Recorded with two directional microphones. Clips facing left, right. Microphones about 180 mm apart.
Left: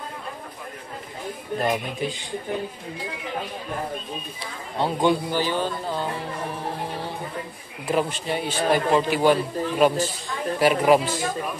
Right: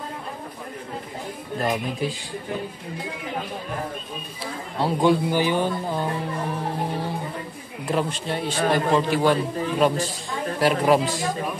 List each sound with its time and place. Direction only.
1.6 s a man's voice: centre (ahead or behind)
4.7 s a man's voice: 5° right (ahead or behind)
5.3 s speech: 15° right (ahead or behind)
7.8 s a man's voice: 5° left (ahead or behind)